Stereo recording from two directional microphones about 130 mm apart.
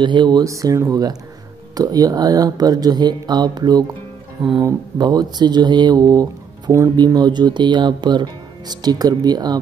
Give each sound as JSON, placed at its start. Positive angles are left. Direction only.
{"t": 0.0, "sound": "speech", "side_deg": -35}